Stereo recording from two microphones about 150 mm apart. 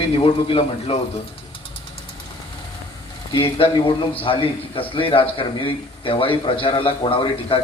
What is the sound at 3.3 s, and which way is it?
A man's voice, 35° left (ahead or behind).